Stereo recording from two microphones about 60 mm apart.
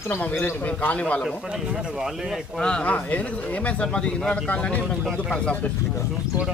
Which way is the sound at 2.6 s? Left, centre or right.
Centre.